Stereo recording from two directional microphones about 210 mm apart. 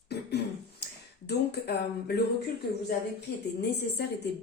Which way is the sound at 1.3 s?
50° left (ahead or behind).